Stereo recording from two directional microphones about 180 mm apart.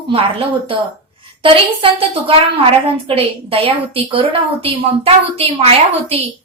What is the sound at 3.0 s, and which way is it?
A woman's voice, 30° right (ahead or behind).